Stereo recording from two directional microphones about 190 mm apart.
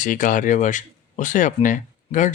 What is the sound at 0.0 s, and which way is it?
Speech, 45° left (ahead or behind).